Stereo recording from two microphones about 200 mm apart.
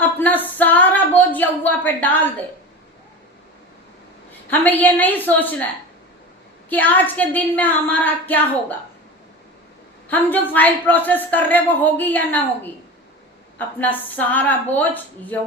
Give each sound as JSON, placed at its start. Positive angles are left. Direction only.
{"t": 0.0, "sound": "a woman's voice", "side_deg": 10}
{"t": 4.4, "sound": "a woman's voice", "side_deg": 10}
{"t": 6.7, "sound": "a woman's voice", "side_deg": 10}
{"t": 10.1, "sound": "a woman's voice", "side_deg": 10}
{"t": 13.6, "sound": "a woman's voice", "side_deg": 10}